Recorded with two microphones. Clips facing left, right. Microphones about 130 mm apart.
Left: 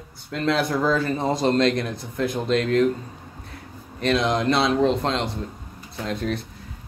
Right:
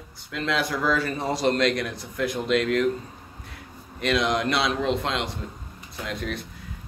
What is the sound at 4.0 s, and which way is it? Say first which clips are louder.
Speech: left 2 dB; 30° left (ahead or behind).